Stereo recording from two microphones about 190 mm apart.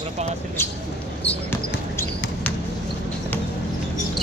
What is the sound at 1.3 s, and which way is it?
Basketball bounce, 10° left (ahead or behind).